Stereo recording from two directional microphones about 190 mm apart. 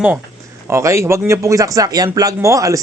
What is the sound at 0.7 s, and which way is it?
Speech, 15° right (ahead or behind).